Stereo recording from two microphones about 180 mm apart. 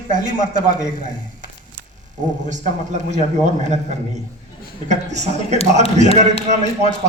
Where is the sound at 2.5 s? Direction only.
40° right (ahead or behind).